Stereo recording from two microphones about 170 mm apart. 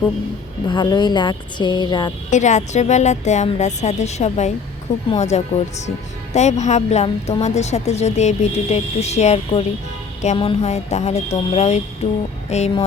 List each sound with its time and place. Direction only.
0.7 s a woman's voice: 25° left (ahead or behind)
2.3 s a woman's voice: 45° left (ahead or behind)